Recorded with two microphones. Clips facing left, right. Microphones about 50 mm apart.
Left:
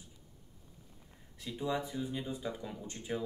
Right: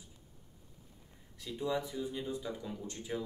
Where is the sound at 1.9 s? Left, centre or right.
Left.